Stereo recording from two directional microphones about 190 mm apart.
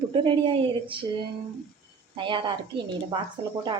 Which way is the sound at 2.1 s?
25° right (ahead or behind).